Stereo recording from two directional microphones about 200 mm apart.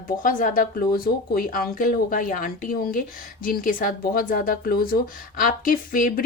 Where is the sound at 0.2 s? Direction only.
40° left (ahead or behind).